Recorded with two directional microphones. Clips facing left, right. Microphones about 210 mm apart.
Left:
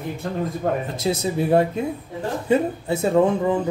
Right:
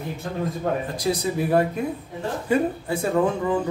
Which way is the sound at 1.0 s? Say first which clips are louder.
Left 2 dB; 25° left (ahead or behind).